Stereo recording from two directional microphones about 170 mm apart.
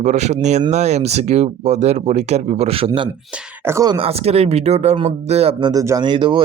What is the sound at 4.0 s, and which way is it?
Speech, 35° right (ahead or behind).